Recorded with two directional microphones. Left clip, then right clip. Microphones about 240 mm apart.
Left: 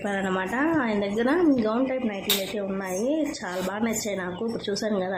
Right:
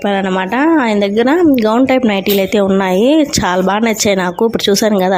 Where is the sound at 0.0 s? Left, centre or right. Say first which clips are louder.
Right 12 dB; right.